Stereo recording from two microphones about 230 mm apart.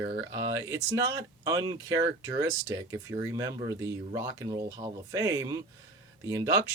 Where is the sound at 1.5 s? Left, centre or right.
Centre.